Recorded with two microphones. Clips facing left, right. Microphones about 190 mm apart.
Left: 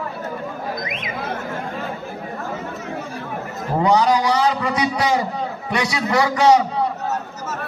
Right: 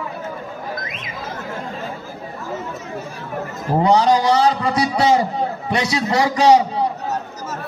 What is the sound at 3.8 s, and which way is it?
A man's voice, 30° right (ahead or behind).